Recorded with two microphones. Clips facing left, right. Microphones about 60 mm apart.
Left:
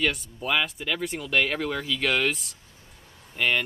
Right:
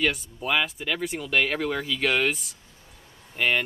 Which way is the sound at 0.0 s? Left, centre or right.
Centre.